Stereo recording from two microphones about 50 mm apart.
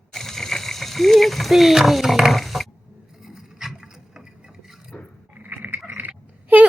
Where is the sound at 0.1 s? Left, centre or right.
Centre.